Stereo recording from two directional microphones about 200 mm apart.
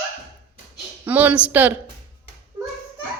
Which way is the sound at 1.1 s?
10° right (ahead or behind).